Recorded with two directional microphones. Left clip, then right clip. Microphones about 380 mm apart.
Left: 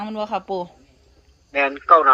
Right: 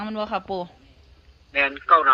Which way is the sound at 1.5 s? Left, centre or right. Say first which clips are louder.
Left 3 dB; centre.